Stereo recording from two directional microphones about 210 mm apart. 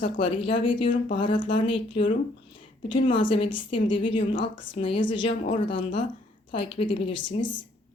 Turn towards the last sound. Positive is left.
turn(degrees=25)  # may be behind; listen again after turning